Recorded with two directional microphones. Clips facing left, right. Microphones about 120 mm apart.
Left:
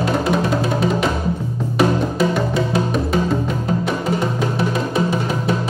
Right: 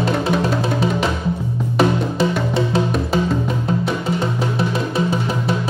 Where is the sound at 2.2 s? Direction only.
30° right (ahead or behind).